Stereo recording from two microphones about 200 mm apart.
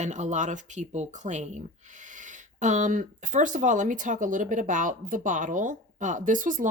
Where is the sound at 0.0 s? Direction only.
35° right (ahead or behind).